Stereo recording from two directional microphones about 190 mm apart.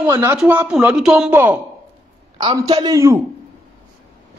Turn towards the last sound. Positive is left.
turn(degrees=-20)  # may be behind; listen again after turning